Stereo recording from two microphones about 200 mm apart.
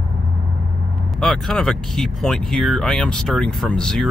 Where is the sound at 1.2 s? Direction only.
Centre (ahead or behind).